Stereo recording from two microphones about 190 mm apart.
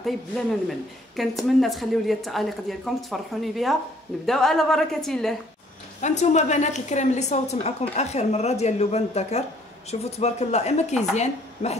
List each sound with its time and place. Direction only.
0.0 s speech: centre (ahead or behind)
5.9 s a woman's voice: 40° left (ahead or behind)